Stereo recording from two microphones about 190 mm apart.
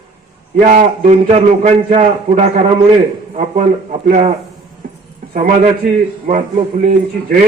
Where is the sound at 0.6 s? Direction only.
35° right (ahead or behind).